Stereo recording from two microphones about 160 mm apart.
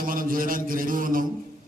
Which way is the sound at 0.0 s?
60° right (ahead or behind).